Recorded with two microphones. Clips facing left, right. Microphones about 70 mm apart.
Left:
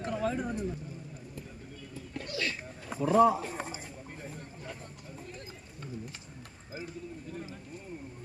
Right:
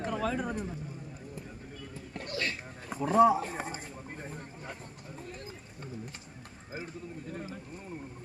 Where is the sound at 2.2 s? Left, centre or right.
Right.